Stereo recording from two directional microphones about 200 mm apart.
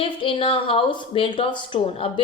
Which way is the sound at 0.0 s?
25° left (ahead or behind).